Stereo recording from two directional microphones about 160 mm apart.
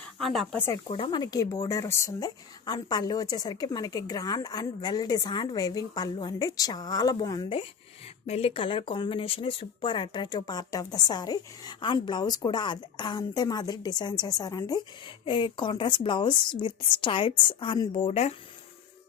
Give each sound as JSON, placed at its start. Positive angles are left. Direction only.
{"t": 0.2, "sound": "speech", "side_deg": 0}
{"t": 0.9, "sound": "a woman's voice", "side_deg": 35}